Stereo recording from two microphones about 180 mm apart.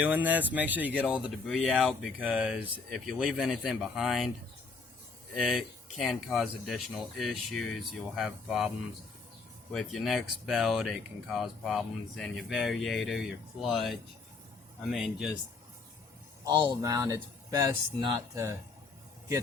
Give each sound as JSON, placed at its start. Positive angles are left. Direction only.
{"t": 0.0, "sound": "speech", "side_deg": -10}
{"t": 5.3, "sound": "speech", "side_deg": 0}
{"t": 9.7, "sound": "speech", "side_deg": 0}
{"t": 16.4, "sound": "speech", "side_deg": -20}